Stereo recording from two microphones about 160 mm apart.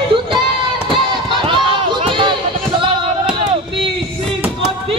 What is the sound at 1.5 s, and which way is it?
Run, 30° right (ahead or behind).